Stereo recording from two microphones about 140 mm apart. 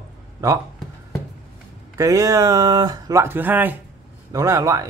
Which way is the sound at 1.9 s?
25° right (ahead or behind).